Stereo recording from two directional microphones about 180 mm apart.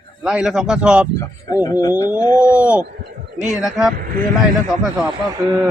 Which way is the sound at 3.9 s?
55° right (ahead or behind).